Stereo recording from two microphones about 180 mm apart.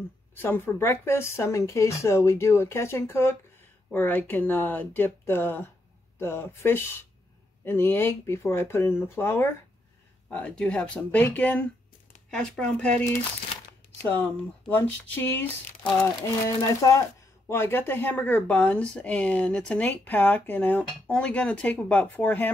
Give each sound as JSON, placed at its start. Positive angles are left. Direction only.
{"t": 0.3, "sound": "speech", "side_deg": 10}